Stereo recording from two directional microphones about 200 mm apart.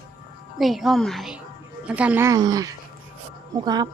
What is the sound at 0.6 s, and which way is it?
Speech, centre (ahead or behind).